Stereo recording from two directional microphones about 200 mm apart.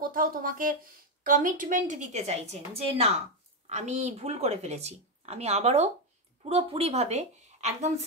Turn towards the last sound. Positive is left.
turn(degrees=-35)  # may be behind; listen again after turning